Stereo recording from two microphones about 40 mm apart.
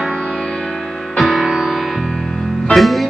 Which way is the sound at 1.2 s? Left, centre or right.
Centre.